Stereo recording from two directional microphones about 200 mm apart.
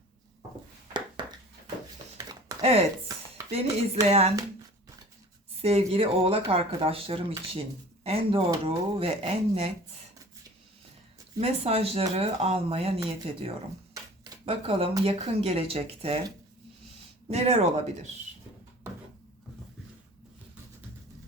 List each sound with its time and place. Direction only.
0.9 s a sound: 20° right (ahead or behind)
2.6 s speech: 30° right (ahead or behind)
4.0 s speech: 30° right (ahead or behind)
5.6 s speech: 30° right (ahead or behind)
11.3 s speech: 30° right (ahead or behind)
17.2 s speech: 30° right (ahead or behind)